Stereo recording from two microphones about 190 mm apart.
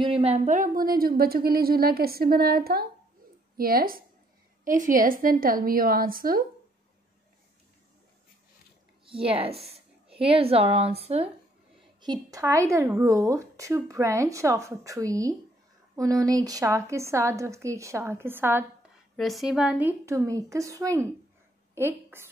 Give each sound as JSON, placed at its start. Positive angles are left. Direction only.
{"t": 0.0, "sound": "a woman's voice", "side_deg": -30}
{"t": 9.0, "sound": "a woman's voice", "side_deg": -30}
{"t": 12.0, "sound": "speech", "side_deg": -20}
{"t": 19.1, "sound": "a woman's voice", "side_deg": 0}